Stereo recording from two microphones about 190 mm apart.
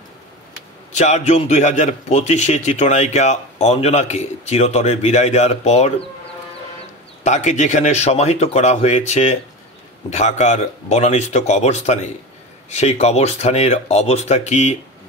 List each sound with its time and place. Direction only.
0.9 s a man's voice: 35° left (ahead or behind)
7.2 s a man's voice: 40° left (ahead or behind)